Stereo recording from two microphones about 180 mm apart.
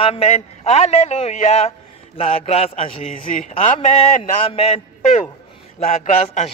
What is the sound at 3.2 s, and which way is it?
Speech, 50° left (ahead or behind).